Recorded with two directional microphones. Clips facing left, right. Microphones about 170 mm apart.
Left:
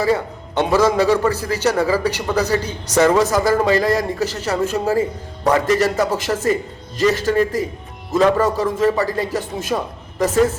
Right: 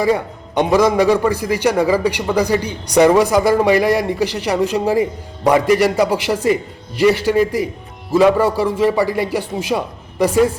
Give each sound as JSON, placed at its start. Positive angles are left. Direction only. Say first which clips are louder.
{"t": 0.0, "sound": "a man's voice", "louder": "right 2 dB", "side_deg": -15}